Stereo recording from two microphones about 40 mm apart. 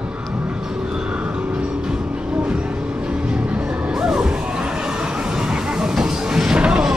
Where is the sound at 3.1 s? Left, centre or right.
Right.